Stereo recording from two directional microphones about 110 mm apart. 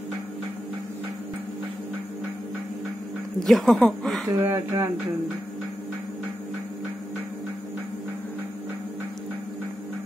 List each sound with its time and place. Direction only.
3.4 s speech: 5° left (ahead or behind)
4.4 s speech: 20° right (ahead or behind)